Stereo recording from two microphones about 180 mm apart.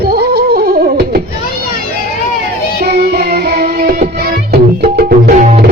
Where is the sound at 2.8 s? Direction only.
60° right (ahead or behind).